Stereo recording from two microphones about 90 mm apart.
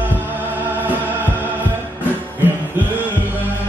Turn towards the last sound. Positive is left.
turn(degrees=-20)  # may be behind; listen again after turning